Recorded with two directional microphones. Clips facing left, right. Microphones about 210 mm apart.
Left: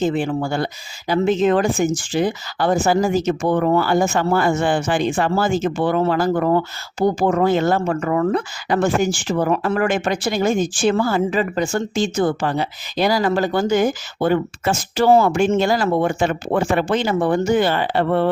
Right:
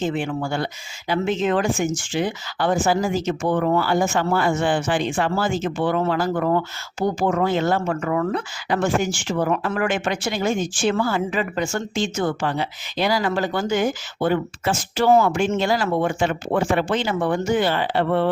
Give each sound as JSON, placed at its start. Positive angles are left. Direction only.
{"t": 0.0, "sound": "speech", "side_deg": 35}